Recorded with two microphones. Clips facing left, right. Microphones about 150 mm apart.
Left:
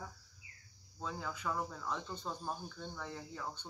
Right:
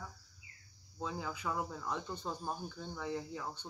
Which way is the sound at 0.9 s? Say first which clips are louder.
Right 2 dB; 5° right (ahead or behind).